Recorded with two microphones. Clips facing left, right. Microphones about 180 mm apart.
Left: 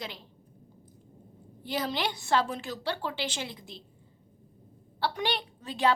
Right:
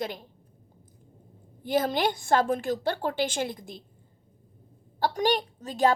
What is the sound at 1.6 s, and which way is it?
A woman's voice, 50° right (ahead or behind).